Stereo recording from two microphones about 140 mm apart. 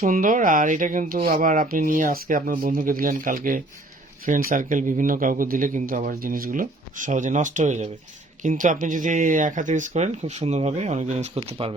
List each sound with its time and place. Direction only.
0.0 s speech: 70° right (ahead or behind); by 11.5 s 50° right (ahead or behind)